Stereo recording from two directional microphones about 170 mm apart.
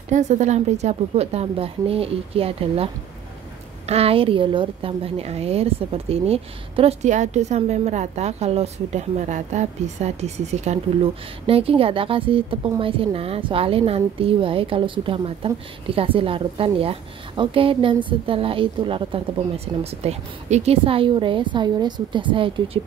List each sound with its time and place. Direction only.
0.1 s a woman's voice: 45° right (ahead or behind)